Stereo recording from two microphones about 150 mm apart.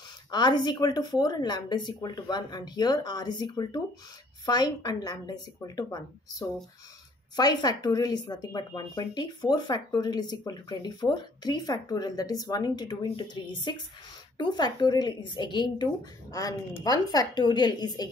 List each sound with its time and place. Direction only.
0.3 s speech: 30° left (ahead or behind)